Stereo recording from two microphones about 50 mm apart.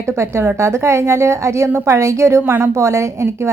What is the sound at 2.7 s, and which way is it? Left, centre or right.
Speech, right.